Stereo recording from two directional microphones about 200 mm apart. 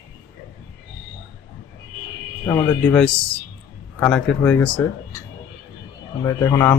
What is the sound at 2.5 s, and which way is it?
Speech, 10° left (ahead or behind).